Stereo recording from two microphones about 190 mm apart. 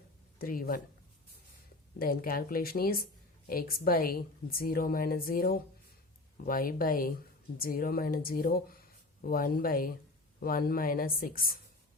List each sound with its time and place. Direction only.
0.3 s speech: 50° left (ahead or behind)
2.0 s a woman's voice: 50° left (ahead or behind)